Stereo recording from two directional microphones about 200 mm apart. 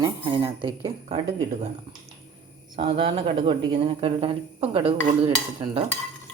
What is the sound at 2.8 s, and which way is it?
Speech, 30° right (ahead or behind).